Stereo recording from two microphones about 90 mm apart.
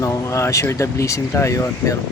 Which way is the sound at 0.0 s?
35° left (ahead or behind).